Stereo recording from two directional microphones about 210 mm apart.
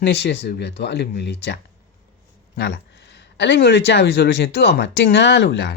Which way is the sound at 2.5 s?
50° left (ahead or behind).